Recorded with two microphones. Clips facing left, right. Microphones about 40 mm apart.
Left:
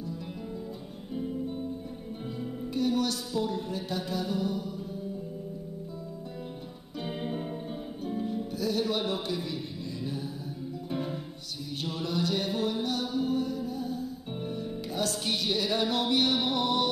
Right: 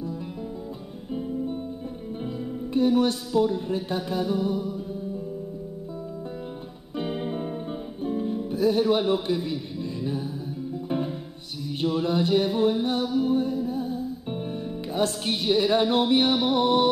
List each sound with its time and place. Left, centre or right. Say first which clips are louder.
2.7 s music: right 7 dB; right
7.0 s music: right 5 dB; centre
11.8 s music: right 8 dB; right